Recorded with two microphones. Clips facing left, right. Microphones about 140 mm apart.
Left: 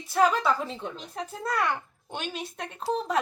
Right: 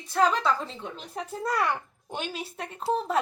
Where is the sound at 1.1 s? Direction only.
10° right (ahead or behind).